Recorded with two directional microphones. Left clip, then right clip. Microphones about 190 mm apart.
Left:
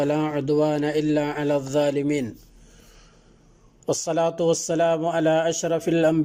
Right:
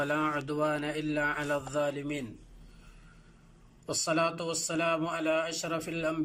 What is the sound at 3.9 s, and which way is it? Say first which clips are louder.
Speech: left 7 dB; 35° left (ahead or behind).